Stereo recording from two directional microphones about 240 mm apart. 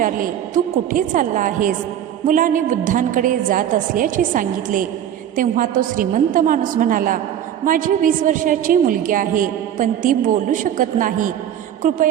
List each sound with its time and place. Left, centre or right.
0.0 s a woman's voice: right